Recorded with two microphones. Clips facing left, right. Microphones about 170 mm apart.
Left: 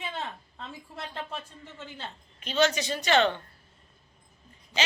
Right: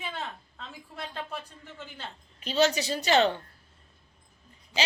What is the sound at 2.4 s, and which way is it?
Speech, 35° right (ahead or behind).